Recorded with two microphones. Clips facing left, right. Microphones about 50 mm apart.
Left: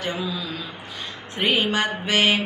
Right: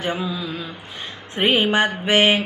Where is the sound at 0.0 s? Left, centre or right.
Right.